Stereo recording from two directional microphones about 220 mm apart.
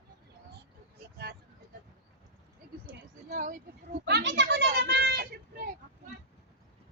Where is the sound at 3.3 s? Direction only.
40° right (ahead or behind).